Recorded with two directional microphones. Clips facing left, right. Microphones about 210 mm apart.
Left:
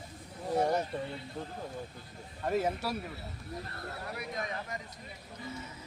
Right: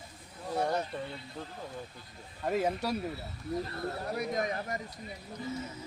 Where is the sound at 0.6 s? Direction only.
15° left (ahead or behind).